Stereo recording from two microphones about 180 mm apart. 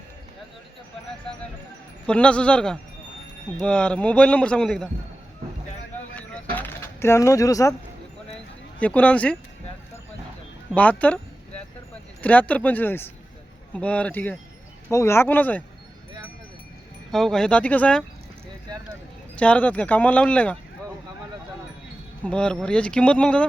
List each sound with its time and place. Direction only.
2.0 s a man's voice: 5° left (ahead or behind)
6.1 s a sound: 10° left (ahead or behind)
8.8 s speech: 5° left (ahead or behind)
10.8 s speech: 10° left (ahead or behind)
12.2 s speech: 10° left (ahead or behind)
17.1 s a man's voice: centre (ahead or behind)
19.4 s speech: 5° left (ahead or behind)
22.2 s a man's voice: 5° left (ahead or behind)